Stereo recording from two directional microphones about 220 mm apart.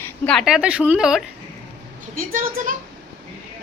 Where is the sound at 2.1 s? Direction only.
40° right (ahead or behind).